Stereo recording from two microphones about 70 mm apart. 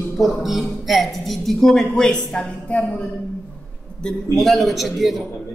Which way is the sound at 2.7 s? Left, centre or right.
Centre.